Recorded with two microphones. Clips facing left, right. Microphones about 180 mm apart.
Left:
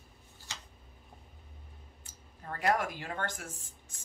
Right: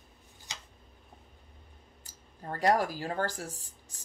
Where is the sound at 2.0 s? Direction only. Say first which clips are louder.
Right 5 dB; 35° right (ahead or behind).